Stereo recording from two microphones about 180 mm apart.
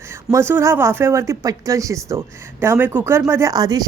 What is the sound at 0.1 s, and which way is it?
Speech, 15° right (ahead or behind).